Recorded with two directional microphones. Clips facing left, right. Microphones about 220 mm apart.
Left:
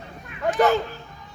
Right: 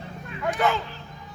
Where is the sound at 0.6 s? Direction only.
40° left (ahead or behind).